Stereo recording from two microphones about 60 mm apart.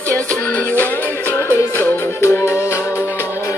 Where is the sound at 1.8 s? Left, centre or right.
Left.